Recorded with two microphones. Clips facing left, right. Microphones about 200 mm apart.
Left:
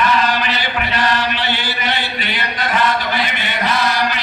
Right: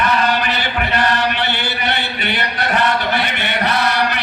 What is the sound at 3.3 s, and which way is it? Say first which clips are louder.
Chant: right 1 dB; 65° right (ahead or behind).